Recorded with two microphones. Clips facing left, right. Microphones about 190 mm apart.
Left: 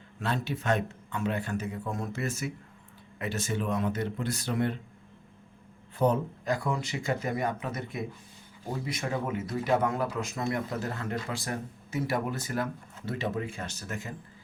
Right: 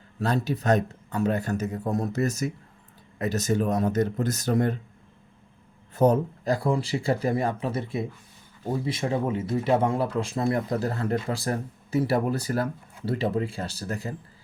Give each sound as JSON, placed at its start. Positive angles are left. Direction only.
{"t": 0.2, "sound": "a man's voice", "side_deg": -40}
{"t": 6.0, "sound": "a man's voice", "side_deg": -40}